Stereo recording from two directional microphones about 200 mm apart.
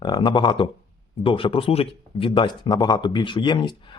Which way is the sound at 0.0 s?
25° left (ahead or behind).